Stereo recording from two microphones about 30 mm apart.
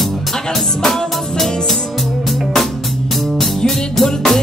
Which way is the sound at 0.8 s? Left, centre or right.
Centre.